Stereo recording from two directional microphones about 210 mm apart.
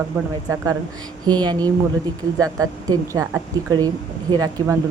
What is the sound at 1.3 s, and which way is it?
Speech, 20° right (ahead or behind).